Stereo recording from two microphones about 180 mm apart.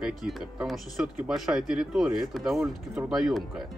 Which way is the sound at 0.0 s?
5° right (ahead or behind).